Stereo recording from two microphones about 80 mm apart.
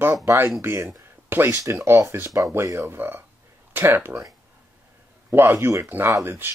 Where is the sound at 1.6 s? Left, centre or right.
Right.